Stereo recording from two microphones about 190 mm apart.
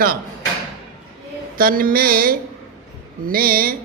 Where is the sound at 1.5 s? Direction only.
50° right (ahead or behind).